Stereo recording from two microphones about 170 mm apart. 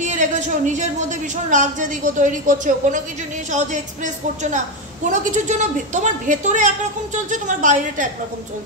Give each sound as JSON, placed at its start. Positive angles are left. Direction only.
{"t": 0.0, "sound": "a man's voice", "side_deg": -45}